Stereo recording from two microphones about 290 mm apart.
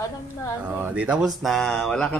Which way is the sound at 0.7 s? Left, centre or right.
Centre.